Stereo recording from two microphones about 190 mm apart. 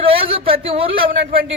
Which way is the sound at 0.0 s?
30° right (ahead or behind).